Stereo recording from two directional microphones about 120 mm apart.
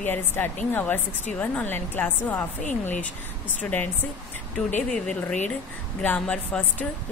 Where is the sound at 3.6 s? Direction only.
15° left (ahead or behind).